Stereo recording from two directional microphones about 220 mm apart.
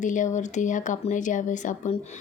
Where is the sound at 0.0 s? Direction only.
35° left (ahead or behind).